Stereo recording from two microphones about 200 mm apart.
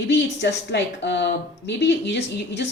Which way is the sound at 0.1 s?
65° left (ahead or behind).